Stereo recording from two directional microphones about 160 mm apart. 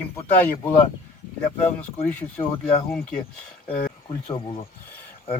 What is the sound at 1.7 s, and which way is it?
Speech, 10° left (ahead or behind).